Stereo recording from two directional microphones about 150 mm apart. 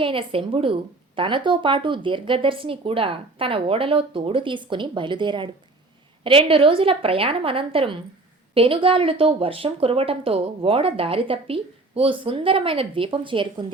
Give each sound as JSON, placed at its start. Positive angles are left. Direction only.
{"t": 0.0, "sound": "speech", "side_deg": -35}